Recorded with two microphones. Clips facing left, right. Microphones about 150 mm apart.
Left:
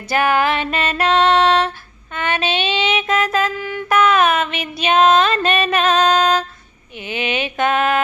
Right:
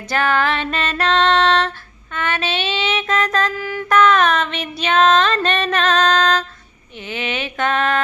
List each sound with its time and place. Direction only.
0.1 s music: 10° left (ahead or behind)
2.1 s child singing: 15° left (ahead or behind)
3.6 s female singing: centre (ahead or behind)
7.0 s music: 15° left (ahead or behind)